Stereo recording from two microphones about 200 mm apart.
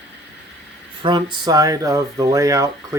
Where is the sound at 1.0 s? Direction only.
25° right (ahead or behind).